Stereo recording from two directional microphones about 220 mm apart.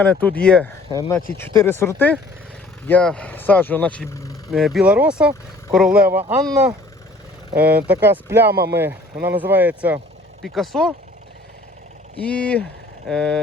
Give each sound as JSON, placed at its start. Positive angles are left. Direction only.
{"t": 0.0, "sound": "speech", "side_deg": 5}
{"t": 0.9, "sound": "speech", "side_deg": 20}
{"t": 1.5, "sound": "speech", "side_deg": 10}
{"t": 4.5, "sound": "speech", "side_deg": 0}
{"t": 8.4, "sound": "speech", "side_deg": -45}
{"t": 8.7, "sound": "speech", "side_deg": -10}
{"t": 12.2, "sound": "speech", "side_deg": 5}